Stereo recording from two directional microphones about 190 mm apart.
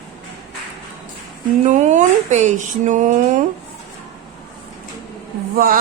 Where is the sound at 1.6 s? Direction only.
40° right (ahead or behind).